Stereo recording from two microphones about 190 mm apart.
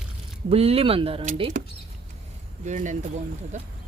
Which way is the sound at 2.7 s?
40° right (ahead or behind).